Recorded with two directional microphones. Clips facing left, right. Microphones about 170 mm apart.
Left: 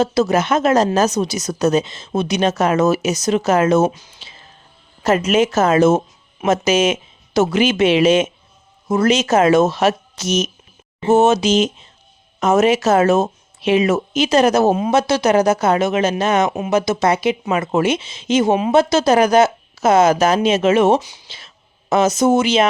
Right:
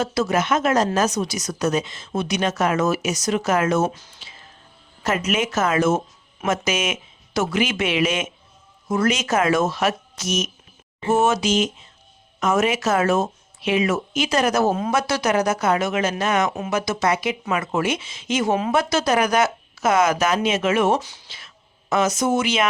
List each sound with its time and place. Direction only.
0.0 s speech: 25° left (ahead or behind)
5.0 s speech: 30° left (ahead or behind); by 21.2 s 15° left (ahead or behind)
21.2 s speech: 25° left (ahead or behind)